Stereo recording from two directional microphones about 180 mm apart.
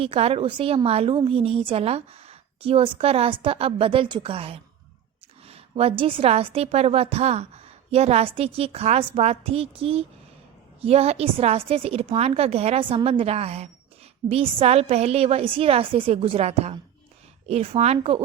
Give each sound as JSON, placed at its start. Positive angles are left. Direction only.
{"t": 0.0, "sound": "a woman's voice", "side_deg": -35}